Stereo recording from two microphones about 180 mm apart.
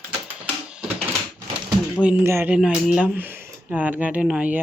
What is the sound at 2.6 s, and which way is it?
Speech, centre (ahead or behind).